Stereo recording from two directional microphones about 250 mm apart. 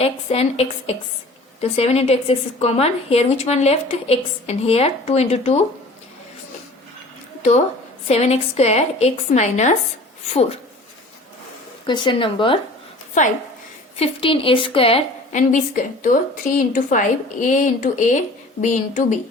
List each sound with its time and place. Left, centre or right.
0.0 s a woman's voice: left
8.0 s a woman's voice: left
11.9 s a woman's voice: centre
13.2 s a woman's voice: left